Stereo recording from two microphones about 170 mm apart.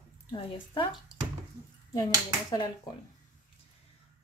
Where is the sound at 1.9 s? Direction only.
20° left (ahead or behind).